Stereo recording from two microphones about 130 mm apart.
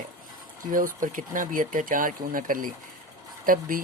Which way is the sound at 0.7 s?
90° right.